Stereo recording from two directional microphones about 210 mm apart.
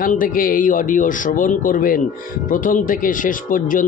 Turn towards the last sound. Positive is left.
turn(degrees=40)  # may be behind; listen again after turning